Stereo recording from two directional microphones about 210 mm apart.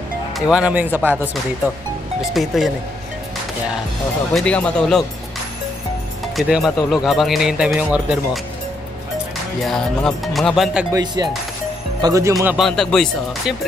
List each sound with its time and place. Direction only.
0.5 s speech: 5° right (ahead or behind)
2.3 s speech: centre (ahead or behind)
4.3 s speech: 5° left (ahead or behind)
6.3 s speech: centre (ahead or behind)
9.6 s speech: centre (ahead or behind)
10.9 s speech: 20° right (ahead or behind)
12.4 s speech: centre (ahead or behind)